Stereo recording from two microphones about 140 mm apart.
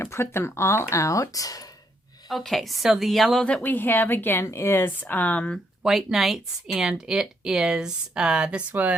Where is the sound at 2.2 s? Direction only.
Centre (ahead or behind).